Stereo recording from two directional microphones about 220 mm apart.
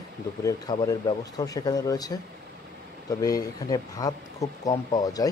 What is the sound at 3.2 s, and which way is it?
Speech, 15° left (ahead or behind).